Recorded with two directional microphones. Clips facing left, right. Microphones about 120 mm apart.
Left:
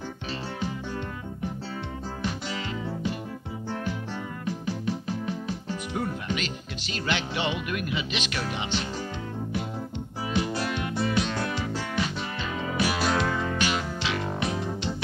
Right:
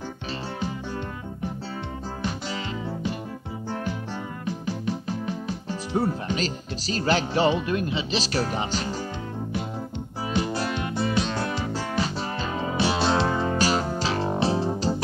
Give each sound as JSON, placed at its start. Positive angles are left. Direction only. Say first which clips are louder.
{"t": 0.6, "sound": "music", "louder": "right 1 dB", "side_deg": -35}
{"t": 4.5, "sound": "speech", "louder": "right 1 dB", "side_deg": -35}
{"t": 10.2, "sound": "music", "louder": "right 2 dB", "side_deg": -35}